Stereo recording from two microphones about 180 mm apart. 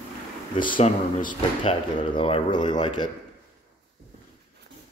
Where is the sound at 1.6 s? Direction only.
35° left (ahead or behind).